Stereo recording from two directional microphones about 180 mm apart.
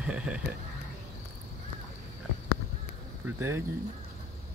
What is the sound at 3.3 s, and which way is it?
Speech, 15° right (ahead or behind).